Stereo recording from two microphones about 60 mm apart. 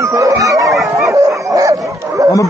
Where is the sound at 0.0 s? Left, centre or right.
Right.